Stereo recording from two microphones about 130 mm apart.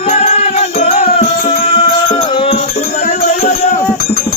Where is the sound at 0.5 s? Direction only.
55° left (ahead or behind).